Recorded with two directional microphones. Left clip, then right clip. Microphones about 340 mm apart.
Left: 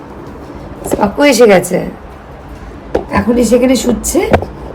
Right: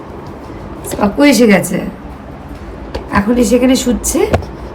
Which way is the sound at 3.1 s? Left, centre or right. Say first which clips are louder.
Left 1 dB; centre.